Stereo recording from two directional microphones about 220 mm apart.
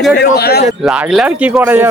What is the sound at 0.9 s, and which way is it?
Speech, 5° right (ahead or behind).